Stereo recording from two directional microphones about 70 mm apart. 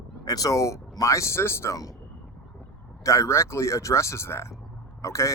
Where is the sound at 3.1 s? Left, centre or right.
Left.